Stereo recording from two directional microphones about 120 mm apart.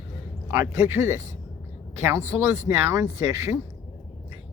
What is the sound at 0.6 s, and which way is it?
Speech, 20° right (ahead or behind).